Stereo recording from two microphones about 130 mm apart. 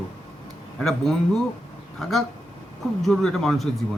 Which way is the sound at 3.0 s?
5° left (ahead or behind).